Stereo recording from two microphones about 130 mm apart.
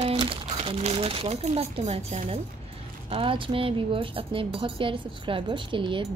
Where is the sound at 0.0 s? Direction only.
45° right (ahead or behind).